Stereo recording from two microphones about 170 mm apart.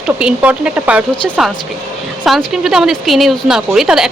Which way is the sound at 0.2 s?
5° right (ahead or behind).